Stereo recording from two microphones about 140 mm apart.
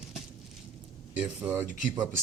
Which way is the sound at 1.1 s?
10° right (ahead or behind).